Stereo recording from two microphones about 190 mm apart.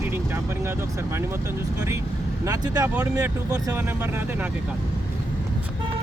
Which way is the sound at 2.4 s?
20° right (ahead or behind).